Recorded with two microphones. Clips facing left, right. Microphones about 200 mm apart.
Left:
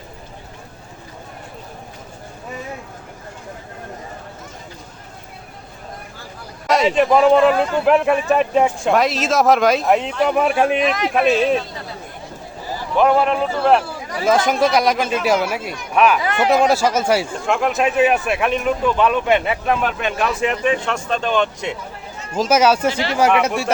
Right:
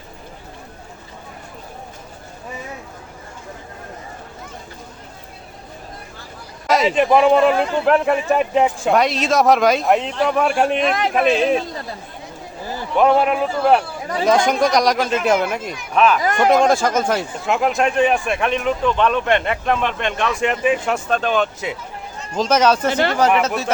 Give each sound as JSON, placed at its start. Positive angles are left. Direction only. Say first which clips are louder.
{"t": 6.7, "sound": "speech", "louder": "even", "side_deg": 0}
{"t": 10.8, "sound": "a man's voice", "louder": "even", "side_deg": -50}
{"t": 13.0, "sound": "a man's voice", "louder": "even", "side_deg": 0}
{"t": 17.4, "sound": "speech", "louder": "even", "side_deg": 0}
{"t": 22.4, "sound": "a man's voice", "louder": "left 1 dB", "side_deg": 10}
{"t": 22.9, "sound": "speech", "louder": "right 3 dB", "side_deg": -55}
{"t": 23.1, "sound": "a man's voice", "louder": "left 3 dB", "side_deg": 10}